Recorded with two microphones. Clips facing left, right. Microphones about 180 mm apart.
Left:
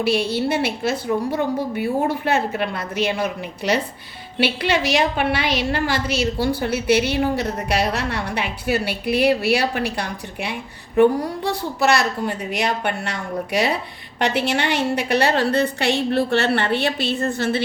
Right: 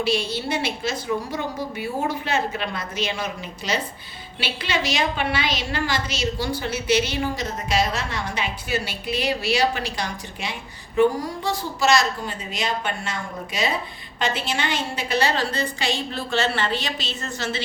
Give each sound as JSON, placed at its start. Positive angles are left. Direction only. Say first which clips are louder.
{"t": 0.0, "sound": "a woman's voice", "louder": "left 4 dB", "side_deg": 60}